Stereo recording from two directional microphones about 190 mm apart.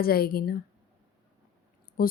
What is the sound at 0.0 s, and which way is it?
Speech, 55° left (ahead or behind).